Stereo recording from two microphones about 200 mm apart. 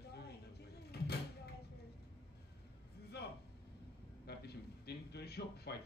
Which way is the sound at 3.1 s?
55° left (ahead or behind).